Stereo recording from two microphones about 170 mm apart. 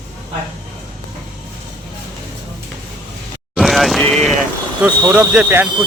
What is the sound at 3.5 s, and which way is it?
Speech, centre (ahead or behind).